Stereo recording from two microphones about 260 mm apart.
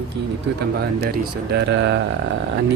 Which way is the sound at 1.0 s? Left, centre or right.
Right.